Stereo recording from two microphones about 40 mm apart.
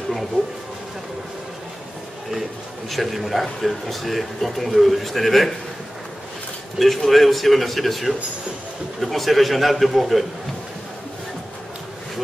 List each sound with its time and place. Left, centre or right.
2.9 s a man's voice: centre
6.8 s a man's voice: centre